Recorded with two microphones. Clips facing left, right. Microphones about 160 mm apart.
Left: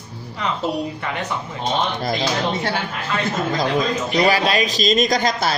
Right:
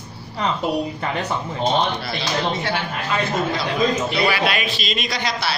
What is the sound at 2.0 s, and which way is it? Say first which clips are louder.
Speech: left 3 dB; 45° left (ahead or behind).